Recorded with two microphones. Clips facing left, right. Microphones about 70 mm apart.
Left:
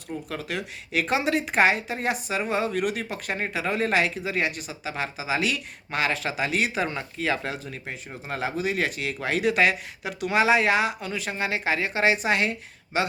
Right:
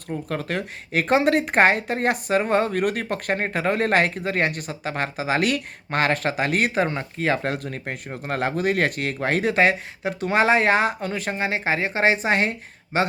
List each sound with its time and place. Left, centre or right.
0.1 s a woman's voice: right
11.3 s speech: right